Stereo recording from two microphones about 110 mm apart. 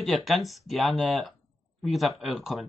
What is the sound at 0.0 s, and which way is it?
Speech, centre (ahead or behind).